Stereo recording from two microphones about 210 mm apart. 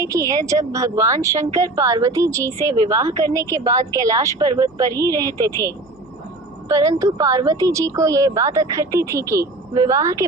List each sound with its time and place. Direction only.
0.0 s a woman's voice: 15° right (ahead or behind)
6.7 s a woman's voice: 15° right (ahead or behind)